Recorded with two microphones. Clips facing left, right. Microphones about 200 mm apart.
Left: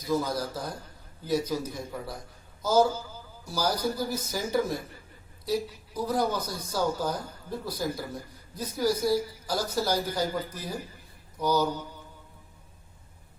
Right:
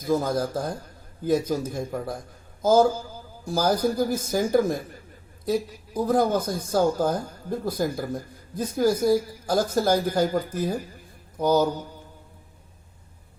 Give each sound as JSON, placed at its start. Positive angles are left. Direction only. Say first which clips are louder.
{"t": 0.0, "sound": "a woman's voice", "louder": "right 5 dB", "side_deg": -50}